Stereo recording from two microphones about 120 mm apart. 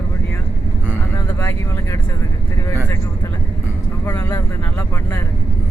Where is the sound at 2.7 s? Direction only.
20° left (ahead or behind).